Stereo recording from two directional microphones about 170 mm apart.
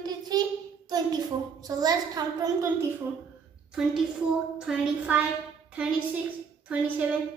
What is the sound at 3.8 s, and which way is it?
A woman's voice, 5° right (ahead or behind).